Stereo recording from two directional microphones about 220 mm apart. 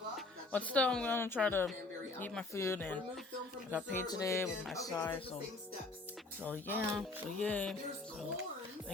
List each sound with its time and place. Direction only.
0.5 s a woman's voice: 5° left (ahead or behind)
6.7 s music: 5° left (ahead or behind)